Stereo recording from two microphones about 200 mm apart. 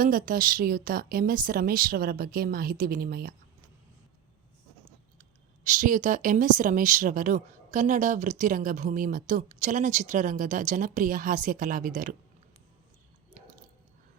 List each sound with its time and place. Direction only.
0.0 s a woman's voice: 45° right (ahead or behind)
5.6 s speech: 40° right (ahead or behind)